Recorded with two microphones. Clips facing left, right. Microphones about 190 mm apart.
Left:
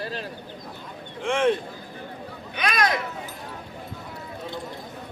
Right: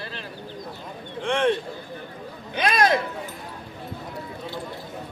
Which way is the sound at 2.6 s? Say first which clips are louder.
Right 4 dB; 25° right (ahead or behind).